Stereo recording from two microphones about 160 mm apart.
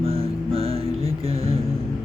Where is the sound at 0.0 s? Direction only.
35° right (ahead or behind).